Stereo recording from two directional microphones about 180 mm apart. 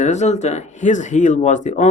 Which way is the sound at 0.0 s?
40° left (ahead or behind).